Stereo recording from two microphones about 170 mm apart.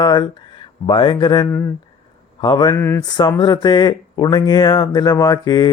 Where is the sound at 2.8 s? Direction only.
15° left (ahead or behind).